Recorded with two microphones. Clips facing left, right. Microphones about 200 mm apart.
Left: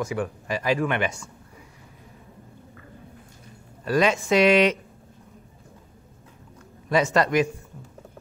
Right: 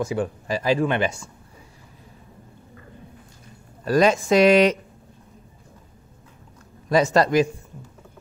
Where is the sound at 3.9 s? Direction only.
40° right (ahead or behind).